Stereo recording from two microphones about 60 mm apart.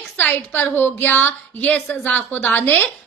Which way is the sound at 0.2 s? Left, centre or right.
Left.